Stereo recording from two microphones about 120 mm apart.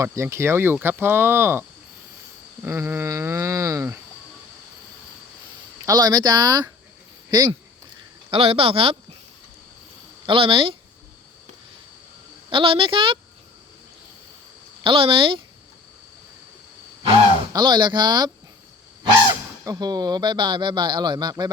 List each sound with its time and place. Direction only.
0.0 s speech: 25° right (ahead or behind)
2.6 s speech: 20° right (ahead or behind)
5.8 s speech: 30° right (ahead or behind)
8.3 s speech: 50° right (ahead or behind)
10.2 s speech: 50° right (ahead or behind)
12.5 s speech: 45° right (ahead or behind)
14.8 s speech: 45° right (ahead or behind)
17.5 s speech: 40° right (ahead or behind)
19.3 s speech: 30° right (ahead or behind)